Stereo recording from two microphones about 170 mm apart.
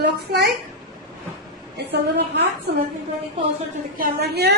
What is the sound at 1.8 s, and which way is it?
Speech, 80° right.